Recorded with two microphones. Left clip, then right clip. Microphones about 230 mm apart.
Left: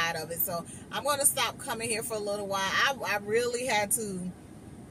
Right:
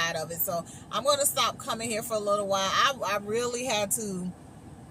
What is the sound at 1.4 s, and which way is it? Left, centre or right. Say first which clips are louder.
Speech: right 3 dB; centre.